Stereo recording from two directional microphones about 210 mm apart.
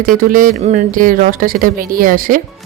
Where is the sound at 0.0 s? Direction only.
40° right (ahead or behind).